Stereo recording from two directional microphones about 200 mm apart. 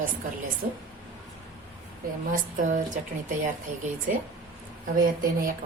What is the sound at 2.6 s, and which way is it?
Speech, 40° right (ahead or behind).